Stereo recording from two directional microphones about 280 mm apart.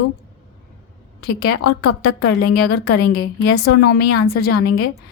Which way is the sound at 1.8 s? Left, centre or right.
Left.